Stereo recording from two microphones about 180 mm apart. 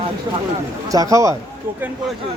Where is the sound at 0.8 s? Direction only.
20° right (ahead or behind).